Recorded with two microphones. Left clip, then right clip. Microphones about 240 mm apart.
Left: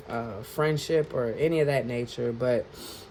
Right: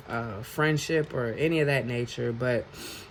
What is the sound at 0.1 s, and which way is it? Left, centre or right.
Speech, right.